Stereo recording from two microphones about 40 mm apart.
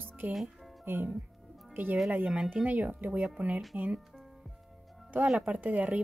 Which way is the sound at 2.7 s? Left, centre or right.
Right.